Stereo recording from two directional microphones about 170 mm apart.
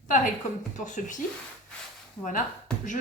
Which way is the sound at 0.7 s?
45° left (ahead or behind).